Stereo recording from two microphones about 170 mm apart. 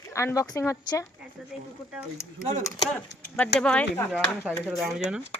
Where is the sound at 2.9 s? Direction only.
10° left (ahead or behind).